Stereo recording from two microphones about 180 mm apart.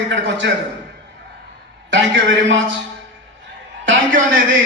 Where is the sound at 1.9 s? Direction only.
80° right.